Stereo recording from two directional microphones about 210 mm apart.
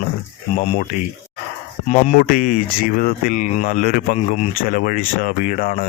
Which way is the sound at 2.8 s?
45° left (ahead or behind).